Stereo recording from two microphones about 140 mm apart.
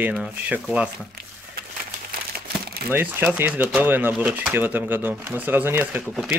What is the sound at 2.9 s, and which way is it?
Speech, 10° right (ahead or behind).